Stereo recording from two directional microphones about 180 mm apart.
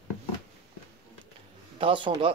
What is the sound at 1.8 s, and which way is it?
Speech, 30° right (ahead or behind).